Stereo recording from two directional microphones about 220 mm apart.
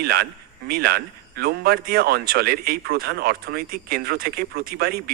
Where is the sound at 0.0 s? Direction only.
45° right (ahead or behind).